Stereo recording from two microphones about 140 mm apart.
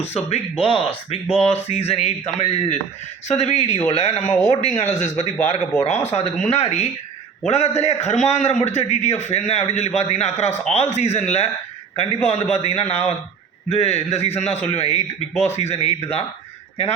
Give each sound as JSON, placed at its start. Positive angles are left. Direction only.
{"t": 0.0, "sound": "a man's voice", "side_deg": 50}